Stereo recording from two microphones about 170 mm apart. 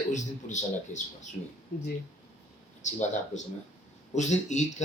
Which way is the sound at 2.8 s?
45° left (ahead or behind).